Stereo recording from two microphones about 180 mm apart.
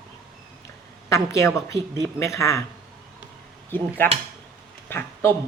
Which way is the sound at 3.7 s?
10° left (ahead or behind).